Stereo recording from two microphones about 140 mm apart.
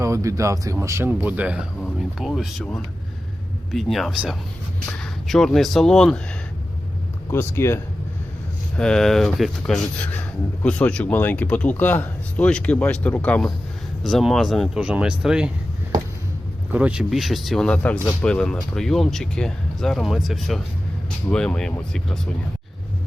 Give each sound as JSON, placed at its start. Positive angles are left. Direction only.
{"t": 0.0, "sound": "speech", "side_deg": -20}
{"t": 3.7, "sound": "speech", "side_deg": 0}
{"t": 7.3, "sound": "speech", "side_deg": 20}
{"t": 8.7, "sound": "speech", "side_deg": 5}
{"t": 16.7, "sound": "speech", "side_deg": -10}